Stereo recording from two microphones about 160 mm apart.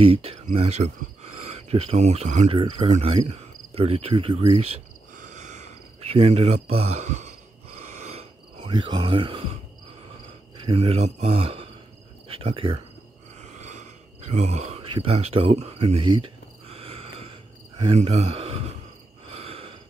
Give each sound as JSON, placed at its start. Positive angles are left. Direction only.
{"t": 0.0, "sound": "speech", "side_deg": -40}
{"t": 5.1, "sound": "cricket", "side_deg": -50}
{"t": 10.6, "sound": "speech", "side_deg": -35}
{"t": 13.4, "sound": "gasp", "side_deg": -45}
{"t": 14.3, "sound": "speech", "side_deg": -45}
{"t": 14.9, "sound": "a sound", "side_deg": -35}
{"t": 17.9, "sound": "speech", "side_deg": -40}
{"t": 19.2, "sound": "a sound", "side_deg": -40}